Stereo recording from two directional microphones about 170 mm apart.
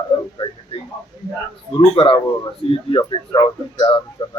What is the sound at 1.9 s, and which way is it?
Speech, 30° left (ahead or behind).